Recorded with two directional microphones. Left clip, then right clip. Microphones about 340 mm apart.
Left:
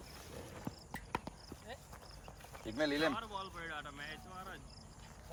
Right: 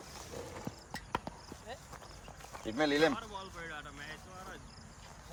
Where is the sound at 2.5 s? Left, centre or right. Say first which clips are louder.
Right 5 dB; right.